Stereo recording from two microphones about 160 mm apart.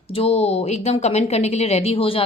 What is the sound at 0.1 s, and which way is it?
Speech, 40° left (ahead or behind).